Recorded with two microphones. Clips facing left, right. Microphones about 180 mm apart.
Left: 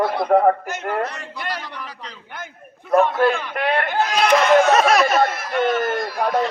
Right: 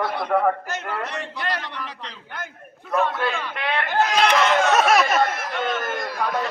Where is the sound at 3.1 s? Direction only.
45° left (ahead or behind).